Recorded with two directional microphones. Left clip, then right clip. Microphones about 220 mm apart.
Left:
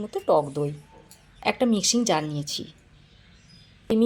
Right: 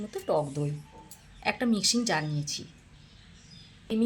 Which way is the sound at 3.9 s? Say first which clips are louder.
Left 7 dB; centre (ahead or behind).